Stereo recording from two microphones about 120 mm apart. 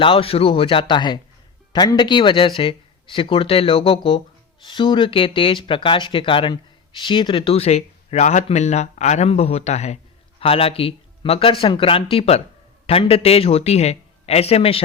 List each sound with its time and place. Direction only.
0.0 s a man's voice: 50° left (ahead or behind); by 10.0 s 65° left (ahead or behind)
10.4 s speech: 50° left (ahead or behind)